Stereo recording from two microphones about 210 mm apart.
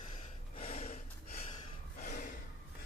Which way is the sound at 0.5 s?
30° left (ahead or behind).